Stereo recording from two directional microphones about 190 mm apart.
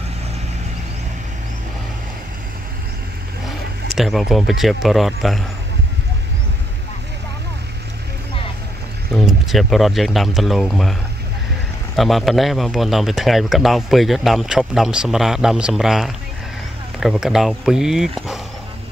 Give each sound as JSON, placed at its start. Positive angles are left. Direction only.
{"t": 3.4, "sound": "speech", "side_deg": 0}
{"t": 9.1, "sound": "speech", "side_deg": 0}